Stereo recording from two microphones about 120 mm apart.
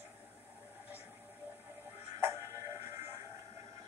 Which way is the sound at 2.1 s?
25° right (ahead or behind).